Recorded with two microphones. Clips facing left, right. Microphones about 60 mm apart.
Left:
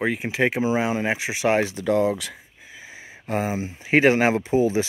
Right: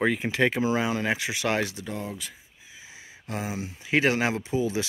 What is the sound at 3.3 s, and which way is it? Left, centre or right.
Speech, left.